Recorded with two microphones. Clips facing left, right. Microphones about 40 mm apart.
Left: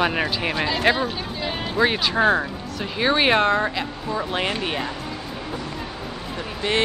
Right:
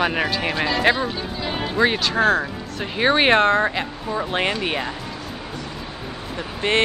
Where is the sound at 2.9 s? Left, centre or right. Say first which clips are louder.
Right 2 dB; centre.